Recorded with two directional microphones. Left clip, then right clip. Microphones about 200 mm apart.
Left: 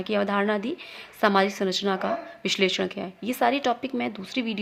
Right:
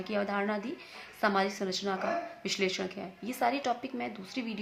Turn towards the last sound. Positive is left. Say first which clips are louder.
# left 8 dB
turn(degrees=45)  # may be behind; listen again after turning